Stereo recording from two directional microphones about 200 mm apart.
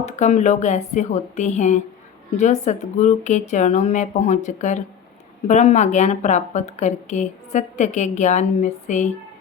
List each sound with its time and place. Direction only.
0.0 s a woman's voice: 35° left (ahead or behind)